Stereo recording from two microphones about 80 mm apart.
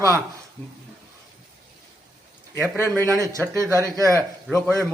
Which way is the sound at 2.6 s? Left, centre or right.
Left.